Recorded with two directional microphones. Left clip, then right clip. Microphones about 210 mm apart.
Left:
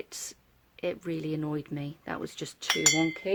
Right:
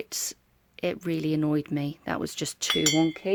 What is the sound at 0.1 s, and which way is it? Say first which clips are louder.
Speech: right 8 dB; 40° right (ahead or behind).